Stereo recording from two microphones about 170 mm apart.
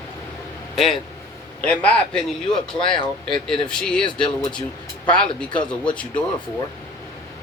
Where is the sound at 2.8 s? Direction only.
30° left (ahead or behind).